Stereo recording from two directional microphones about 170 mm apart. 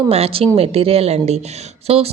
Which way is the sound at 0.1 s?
35° right (ahead or behind).